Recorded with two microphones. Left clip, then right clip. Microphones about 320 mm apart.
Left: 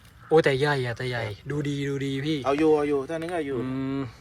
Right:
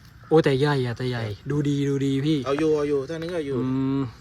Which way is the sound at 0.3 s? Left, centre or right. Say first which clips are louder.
Right 1 dB; centre.